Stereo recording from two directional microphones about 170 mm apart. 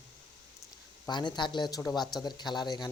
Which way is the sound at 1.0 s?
25° left (ahead or behind).